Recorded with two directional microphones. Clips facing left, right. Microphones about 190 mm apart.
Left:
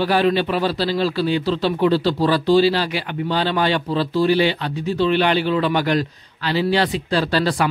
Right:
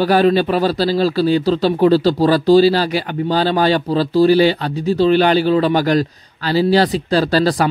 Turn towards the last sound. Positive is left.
turn(degrees=-40)  # may be behind; listen again after turning